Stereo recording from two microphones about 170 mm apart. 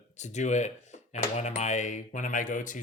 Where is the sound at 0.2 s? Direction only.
45° left (ahead or behind).